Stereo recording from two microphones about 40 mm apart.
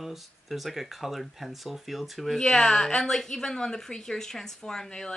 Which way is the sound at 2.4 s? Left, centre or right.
Centre.